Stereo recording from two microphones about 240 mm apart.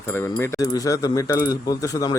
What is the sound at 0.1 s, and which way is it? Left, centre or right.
Speech, centre.